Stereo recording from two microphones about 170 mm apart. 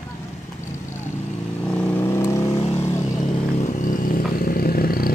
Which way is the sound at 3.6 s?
50° left (ahead or behind).